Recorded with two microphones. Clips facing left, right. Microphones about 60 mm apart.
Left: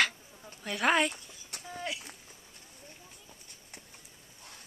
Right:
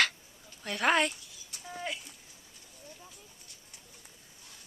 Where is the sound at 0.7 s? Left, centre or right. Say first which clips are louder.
Even; centre.